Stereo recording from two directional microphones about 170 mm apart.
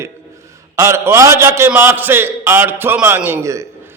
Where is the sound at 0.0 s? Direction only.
15° right (ahead or behind).